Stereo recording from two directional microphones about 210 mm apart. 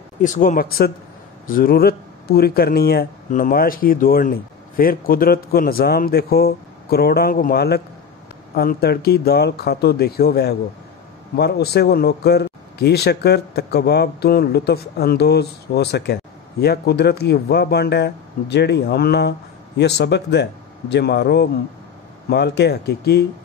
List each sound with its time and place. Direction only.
0.2 s a man's voice: 35° left (ahead or behind)